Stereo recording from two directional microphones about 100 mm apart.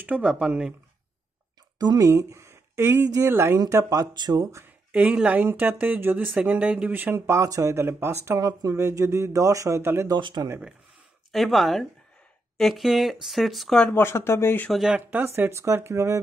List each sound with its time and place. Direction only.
0.0 s speech: 10° right (ahead or behind)
1.8 s speech: 40° right (ahead or behind)
2.0 s speech: 30° right (ahead or behind)
4.9 s speech: 15° right (ahead or behind)
8.3 s speech: 35° right (ahead or behind)
10.0 s speech: 50° right (ahead or behind)
11.3 s speech: centre (ahead or behind)
13.7 s speech: 20° left (ahead or behind)
14.7 s speech: 5° right (ahead or behind)
15.0 s speech: 20° right (ahead or behind)